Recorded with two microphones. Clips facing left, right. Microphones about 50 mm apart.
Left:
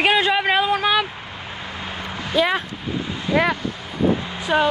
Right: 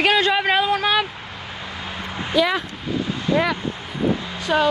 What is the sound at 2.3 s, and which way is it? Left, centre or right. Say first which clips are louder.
Speech: even; left.